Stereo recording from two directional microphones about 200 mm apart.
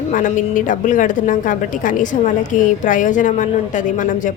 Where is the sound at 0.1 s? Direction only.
40° left (ahead or behind).